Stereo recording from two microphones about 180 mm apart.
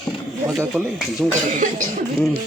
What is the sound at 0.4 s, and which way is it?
Speech, 5° right (ahead or behind).